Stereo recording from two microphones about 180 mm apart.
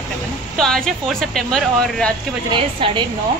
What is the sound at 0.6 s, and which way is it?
Speech, 5° left (ahead or behind).